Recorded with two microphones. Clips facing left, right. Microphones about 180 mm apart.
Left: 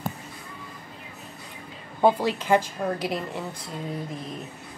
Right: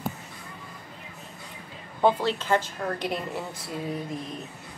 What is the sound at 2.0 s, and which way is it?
A woman's voice, 10° left (ahead or behind).